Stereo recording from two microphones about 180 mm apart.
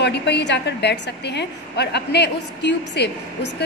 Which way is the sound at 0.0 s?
70° left (ahead or behind).